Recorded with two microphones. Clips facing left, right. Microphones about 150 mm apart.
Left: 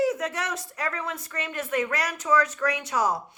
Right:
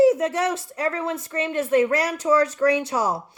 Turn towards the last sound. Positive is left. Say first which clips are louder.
# right 4 dB
turn(degrees=-30)  # may be behind; listen again after turning